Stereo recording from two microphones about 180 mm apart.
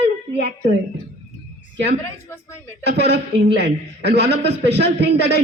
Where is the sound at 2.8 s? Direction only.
65° right (ahead or behind).